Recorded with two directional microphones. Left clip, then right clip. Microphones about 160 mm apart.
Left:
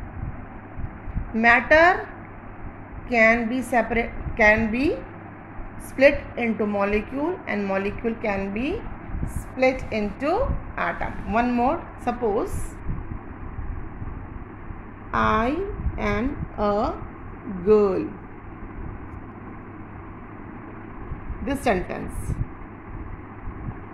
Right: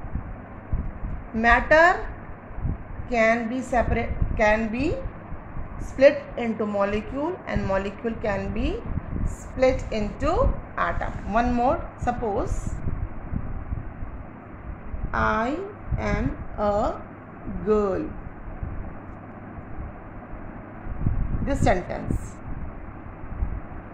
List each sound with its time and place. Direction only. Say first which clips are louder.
1.3 s a woman's voice: left 1 dB; 30° left (ahead or behind)
3.1 s a woman's voice: left 3 dB; 30° left (ahead or behind)
5.9 s a woman's voice: even; 25° left (ahead or behind)
15.0 s a woman's voice: left 2 dB; 40° left (ahead or behind)
17.6 s a woman's voice: left 4 dB; 20° left (ahead or behind)
21.5 s a woman's voice: even; 25° left (ahead or behind)